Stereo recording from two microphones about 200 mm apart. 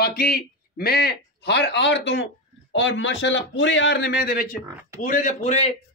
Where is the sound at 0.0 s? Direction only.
50° left (ahead or behind).